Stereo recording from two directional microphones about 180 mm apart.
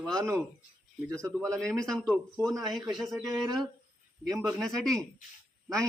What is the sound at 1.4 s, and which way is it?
A man's voice, 5° left (ahead or behind).